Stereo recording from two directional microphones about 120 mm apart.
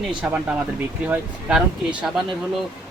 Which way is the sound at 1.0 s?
10° right (ahead or behind).